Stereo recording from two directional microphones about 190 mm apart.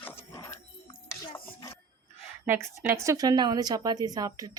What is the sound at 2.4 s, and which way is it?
A woman's voice, 10° right (ahead or behind).